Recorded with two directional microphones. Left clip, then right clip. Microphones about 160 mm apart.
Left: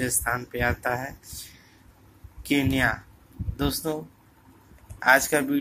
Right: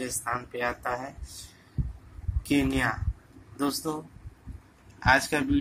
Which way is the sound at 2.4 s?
20° left (ahead or behind).